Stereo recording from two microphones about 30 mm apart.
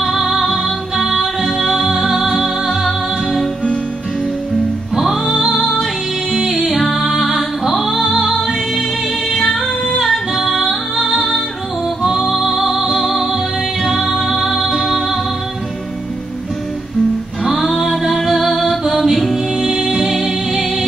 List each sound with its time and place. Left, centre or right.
0.0 s music: centre
5.0 s music: centre
6.5 s music: centre
13.8 s music: centre
17.4 s music: centre